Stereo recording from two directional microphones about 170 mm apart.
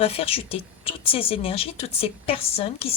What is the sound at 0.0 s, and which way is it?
Speech, 35° left (ahead or behind).